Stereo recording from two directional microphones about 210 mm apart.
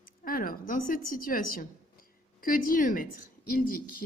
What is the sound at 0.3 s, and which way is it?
A woman's voice, 40° left (ahead or behind).